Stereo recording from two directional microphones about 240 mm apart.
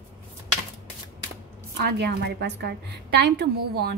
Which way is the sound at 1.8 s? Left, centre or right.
Right.